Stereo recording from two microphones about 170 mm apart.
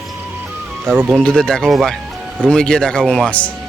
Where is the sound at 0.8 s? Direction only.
10° right (ahead or behind).